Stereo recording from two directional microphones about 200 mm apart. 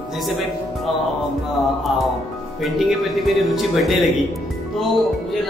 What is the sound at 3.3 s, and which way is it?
Speech, centre (ahead or behind).